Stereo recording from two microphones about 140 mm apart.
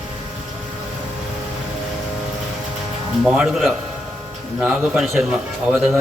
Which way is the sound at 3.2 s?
5° right (ahead or behind).